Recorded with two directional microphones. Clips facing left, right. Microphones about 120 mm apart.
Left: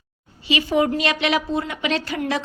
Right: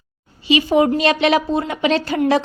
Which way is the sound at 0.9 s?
35° right (ahead or behind).